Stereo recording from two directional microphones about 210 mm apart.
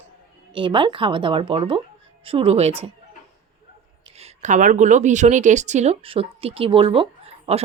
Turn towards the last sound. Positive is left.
turn(degrees=-25)  # may be behind; listen again after turning